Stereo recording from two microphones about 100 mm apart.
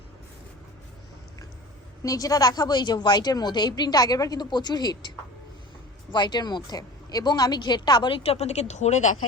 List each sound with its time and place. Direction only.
2.0 s a woman's voice: 35° left (ahead or behind)
8.2 s speech: 90° left